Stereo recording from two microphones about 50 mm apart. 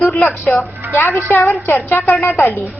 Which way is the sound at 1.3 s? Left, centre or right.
Left.